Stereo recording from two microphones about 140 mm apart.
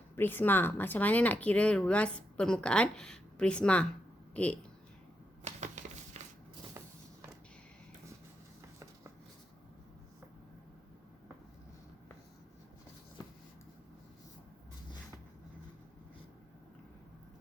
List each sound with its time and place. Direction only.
0.2 s speech: 15° left (ahead or behind)
5.5 s a sound: 55° right (ahead or behind)
6.2 s walk: 50° right (ahead or behind)